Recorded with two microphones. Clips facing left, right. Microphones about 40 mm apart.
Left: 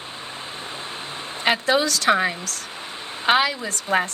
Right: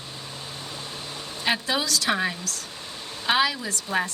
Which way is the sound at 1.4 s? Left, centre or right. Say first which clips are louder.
Left 6 dB; left.